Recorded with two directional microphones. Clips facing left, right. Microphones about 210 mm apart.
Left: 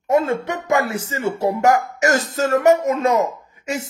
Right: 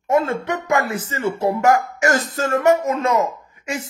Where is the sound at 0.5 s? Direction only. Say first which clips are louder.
Right 1 dB; 45° right (ahead or behind).